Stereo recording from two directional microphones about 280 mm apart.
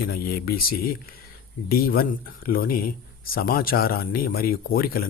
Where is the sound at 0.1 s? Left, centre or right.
Left.